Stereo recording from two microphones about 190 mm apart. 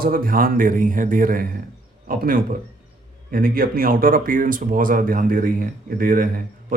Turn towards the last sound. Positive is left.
turn(degrees=-45)  # may be behind; listen again after turning